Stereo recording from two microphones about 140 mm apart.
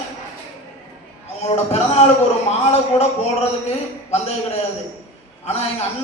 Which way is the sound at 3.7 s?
50° left (ahead or behind).